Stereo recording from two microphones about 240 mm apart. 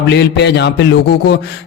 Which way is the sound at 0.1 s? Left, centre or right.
Left.